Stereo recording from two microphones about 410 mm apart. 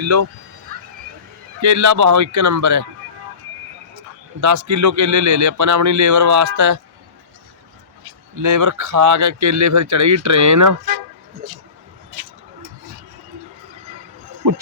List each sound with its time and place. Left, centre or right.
0.0 s speech: right
1.6 s speech: right
4.4 s speech: right
8.4 s speech: right